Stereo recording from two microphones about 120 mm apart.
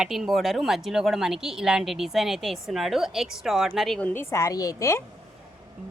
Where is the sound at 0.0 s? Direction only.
5° right (ahead or behind).